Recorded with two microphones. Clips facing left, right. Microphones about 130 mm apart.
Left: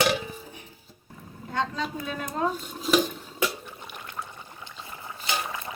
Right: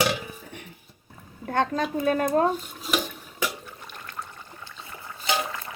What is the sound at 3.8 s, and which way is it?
Water, 15° left (ahead or behind).